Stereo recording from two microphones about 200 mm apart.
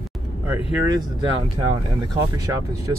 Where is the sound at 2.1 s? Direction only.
15° right (ahead or behind).